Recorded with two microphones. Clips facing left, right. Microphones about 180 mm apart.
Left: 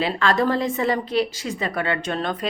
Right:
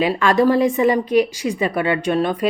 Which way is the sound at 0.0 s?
15° right (ahead or behind).